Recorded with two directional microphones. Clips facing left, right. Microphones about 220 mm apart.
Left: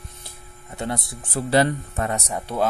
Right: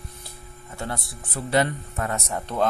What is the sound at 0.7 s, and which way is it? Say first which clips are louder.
Speech: left 4 dB; 20° left (ahead or behind).